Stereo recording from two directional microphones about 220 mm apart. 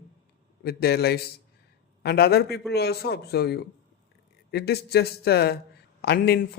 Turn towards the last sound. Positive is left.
turn(degrees=45)  # may be behind; listen again after turning